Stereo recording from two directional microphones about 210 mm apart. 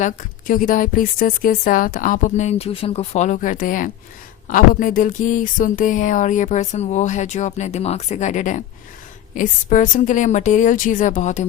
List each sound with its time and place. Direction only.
0.0 s speech: 40° left (ahead or behind)